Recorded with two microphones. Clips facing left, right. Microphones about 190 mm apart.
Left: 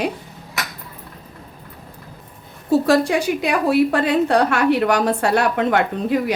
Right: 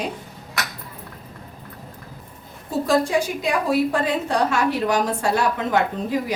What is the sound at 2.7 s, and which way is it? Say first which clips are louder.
A woman's voice: left 4 dB; 70° left (ahead or behind).